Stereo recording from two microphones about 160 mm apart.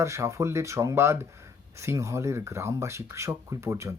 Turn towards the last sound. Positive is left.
turn(degrees=-15)  # may be behind; listen again after turning